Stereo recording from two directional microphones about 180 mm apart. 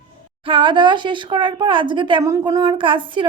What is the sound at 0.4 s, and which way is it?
A woman's voice, 25° right (ahead or behind).